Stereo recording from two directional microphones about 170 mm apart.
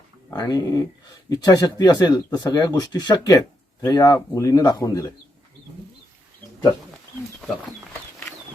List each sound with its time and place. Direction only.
0.3 s speech: 20° left (ahead or behind)